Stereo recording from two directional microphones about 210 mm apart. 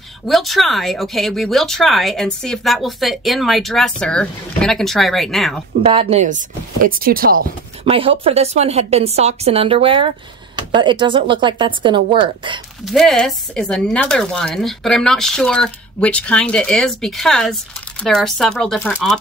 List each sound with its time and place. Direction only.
0.3 s speech: centre (ahead or behind)
5.8 s speech: 25° right (ahead or behind); by 7.4 s 45° right (ahead or behind)
7.8 s a woman's voice: 25° right (ahead or behind)
12.8 s speech: centre (ahead or behind)